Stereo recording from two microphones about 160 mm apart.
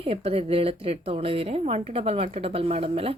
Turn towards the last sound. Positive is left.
turn(degrees=-35)  # may be behind; listen again after turning